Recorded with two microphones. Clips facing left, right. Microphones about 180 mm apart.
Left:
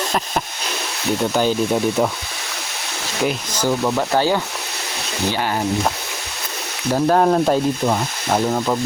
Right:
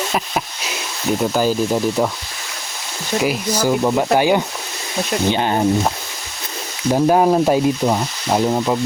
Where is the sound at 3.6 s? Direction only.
15° right (ahead or behind).